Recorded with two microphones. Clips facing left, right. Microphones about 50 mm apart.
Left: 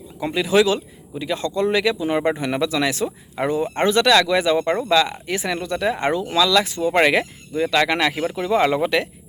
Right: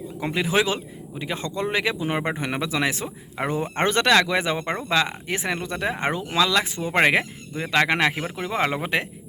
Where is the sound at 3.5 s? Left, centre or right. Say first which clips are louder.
Left 4 dB; right.